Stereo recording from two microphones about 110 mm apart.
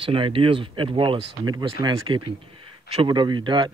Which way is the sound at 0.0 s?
50° right (ahead or behind).